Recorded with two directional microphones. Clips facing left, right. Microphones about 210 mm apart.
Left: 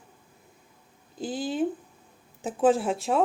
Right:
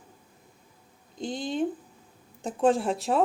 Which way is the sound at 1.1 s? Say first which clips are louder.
Left 1 dB; 5° left (ahead or behind).